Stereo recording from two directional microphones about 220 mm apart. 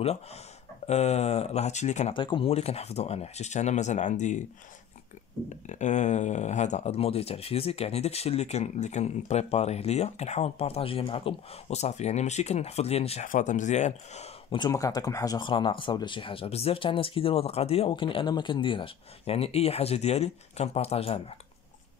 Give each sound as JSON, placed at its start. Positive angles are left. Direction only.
{"t": 0.8, "sound": "speech", "side_deg": 30}
{"t": 5.7, "sound": "speech", "side_deg": 35}